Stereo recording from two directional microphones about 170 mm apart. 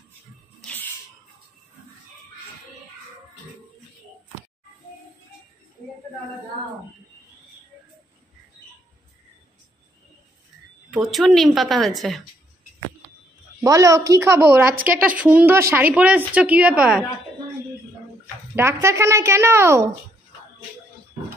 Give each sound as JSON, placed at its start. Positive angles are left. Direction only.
{"t": 0.6, "sound": "a sound", "side_deg": 5}
{"t": 10.9, "sound": "speech", "side_deg": 0}
{"t": 13.6, "sound": "a woman's voice", "side_deg": -20}
{"t": 18.2, "sound": "speech", "side_deg": -15}